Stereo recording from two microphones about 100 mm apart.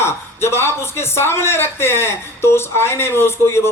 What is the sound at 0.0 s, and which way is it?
A man's voice, 25° left (ahead or behind).